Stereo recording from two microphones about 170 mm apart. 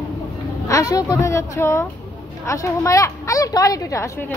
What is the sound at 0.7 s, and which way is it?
A woman's voice, 20° left (ahead or behind).